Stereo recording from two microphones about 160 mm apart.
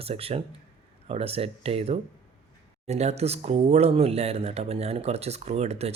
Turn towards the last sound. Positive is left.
turn(degrees=-40)  # may be behind; listen again after turning